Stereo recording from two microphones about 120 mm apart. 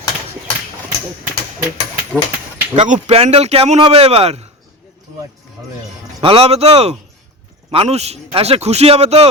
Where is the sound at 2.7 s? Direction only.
85° right.